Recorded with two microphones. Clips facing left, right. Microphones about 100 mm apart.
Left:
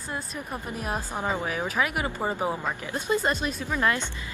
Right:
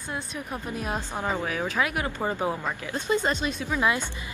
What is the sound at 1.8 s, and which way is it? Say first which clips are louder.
Speech: left 1 dB; 5° left (ahead or behind).